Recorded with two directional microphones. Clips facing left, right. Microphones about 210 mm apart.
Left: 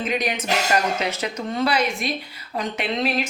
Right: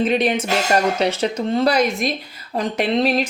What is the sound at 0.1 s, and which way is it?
Speech, 30° right (ahead or behind).